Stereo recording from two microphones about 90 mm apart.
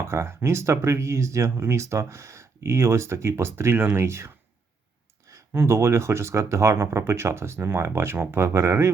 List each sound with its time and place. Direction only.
0.0 s speech: 25° right (ahead or behind)
5.5 s speech: 30° right (ahead or behind)